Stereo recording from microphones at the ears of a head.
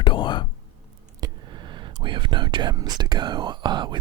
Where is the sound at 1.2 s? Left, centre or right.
Right.